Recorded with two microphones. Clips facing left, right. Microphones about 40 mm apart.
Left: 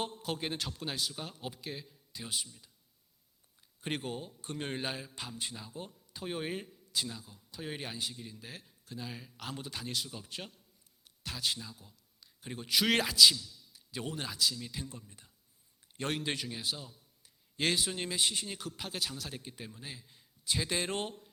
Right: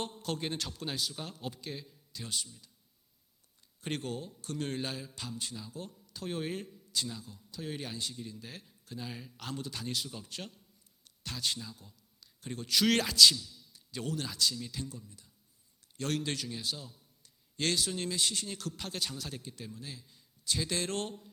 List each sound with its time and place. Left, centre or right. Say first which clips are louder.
0.0 s a man's voice: even; centre
3.8 s a man's voice: even; centre
9.6 s a man's voice: right 3 dB; centre
9.8 s a man's voice: right 1 dB; centre
13.9 s a man's voice: right 2 dB; centre
14.3 s a man's voice: even; centre
14.8 s speech: right 1 dB; left
16.0 s a man's voice: right 1 dB; left; by 19.4 s centre
19.4 s a man's voice: right 1 dB; centre